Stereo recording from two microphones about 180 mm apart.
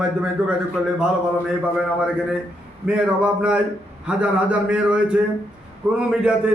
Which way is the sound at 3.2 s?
5° right (ahead or behind).